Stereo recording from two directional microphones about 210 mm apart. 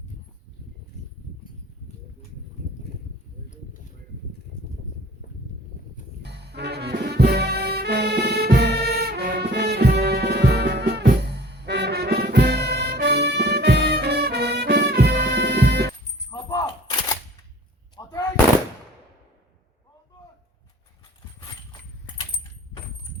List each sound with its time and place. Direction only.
6.2 s brass instrument: 50° right (ahead or behind)
16.3 s a sound: 15° left (ahead or behind)
17.9 s gunshot: 15° left (ahead or behind)